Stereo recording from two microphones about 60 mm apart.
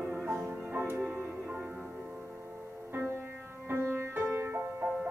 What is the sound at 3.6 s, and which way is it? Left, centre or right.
Music, right.